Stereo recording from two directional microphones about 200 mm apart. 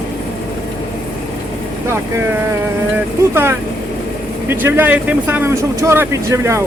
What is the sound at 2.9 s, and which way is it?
Speech, 10° right (ahead or behind).